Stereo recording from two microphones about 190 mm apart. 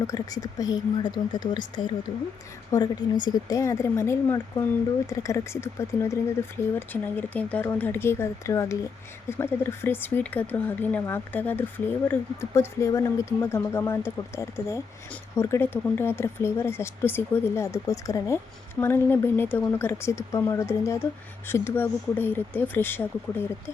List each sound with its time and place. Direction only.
0.1 s speech: 20° left (ahead or behind)